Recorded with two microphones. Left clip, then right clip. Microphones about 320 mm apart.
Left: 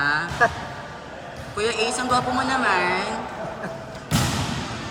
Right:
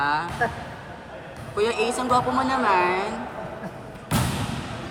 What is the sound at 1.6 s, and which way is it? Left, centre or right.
Speech, centre.